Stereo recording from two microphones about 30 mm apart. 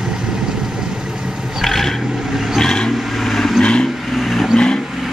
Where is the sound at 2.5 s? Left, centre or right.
Left.